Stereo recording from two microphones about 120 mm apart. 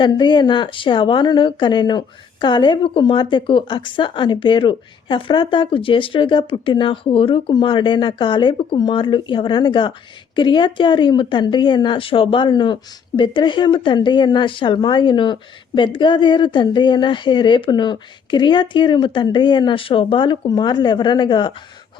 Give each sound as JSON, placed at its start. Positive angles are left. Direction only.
{"t": 0.0, "sound": "speech", "side_deg": 40}